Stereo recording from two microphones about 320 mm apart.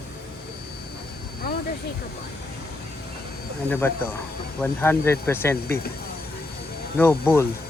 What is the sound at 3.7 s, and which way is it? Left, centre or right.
Speech, centre.